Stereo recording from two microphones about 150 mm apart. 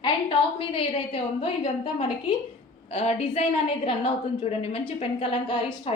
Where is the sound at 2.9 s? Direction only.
45° left (ahead or behind).